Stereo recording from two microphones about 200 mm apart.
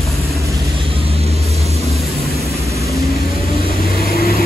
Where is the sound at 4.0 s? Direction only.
50° left (ahead or behind).